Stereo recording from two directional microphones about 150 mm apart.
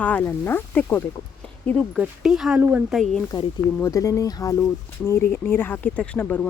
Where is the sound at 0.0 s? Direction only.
10° left (ahead or behind).